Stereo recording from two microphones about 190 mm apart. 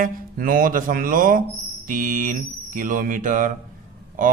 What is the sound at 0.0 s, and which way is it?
A man's voice, 45° right (ahead or behind).